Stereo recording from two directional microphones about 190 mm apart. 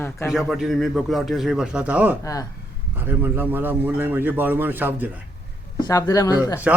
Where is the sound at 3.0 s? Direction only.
10° right (ahead or behind).